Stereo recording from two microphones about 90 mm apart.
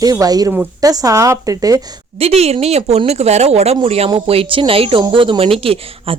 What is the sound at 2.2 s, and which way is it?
Speech, 90° right.